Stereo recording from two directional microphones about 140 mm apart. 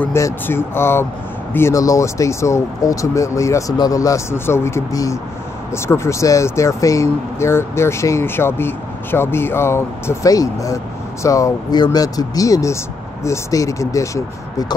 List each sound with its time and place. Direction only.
0.0 s speech: 15° left (ahead or behind)